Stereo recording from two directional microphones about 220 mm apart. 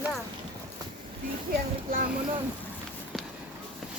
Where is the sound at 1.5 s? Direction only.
40° right (ahead or behind).